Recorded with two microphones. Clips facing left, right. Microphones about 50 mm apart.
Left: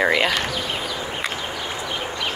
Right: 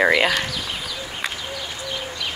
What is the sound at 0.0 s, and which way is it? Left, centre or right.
Speech, centre.